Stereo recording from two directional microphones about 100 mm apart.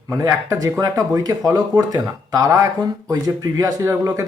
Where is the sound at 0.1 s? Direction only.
30° right (ahead or behind).